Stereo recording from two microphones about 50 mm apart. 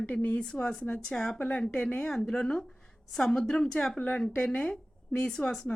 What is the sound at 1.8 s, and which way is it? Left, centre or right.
Speech, left.